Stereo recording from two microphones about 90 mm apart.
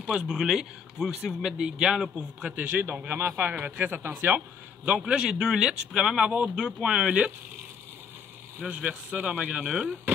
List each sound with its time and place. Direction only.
0.0 s speech: 10° right (ahead or behind); by 4.4 s 25° right (ahead or behind)
4.8 s speech: 10° right (ahead or behind)
8.6 s speech: 15° right (ahead or behind)